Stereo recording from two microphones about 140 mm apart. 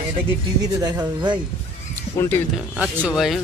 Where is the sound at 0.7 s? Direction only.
30° right (ahead or behind).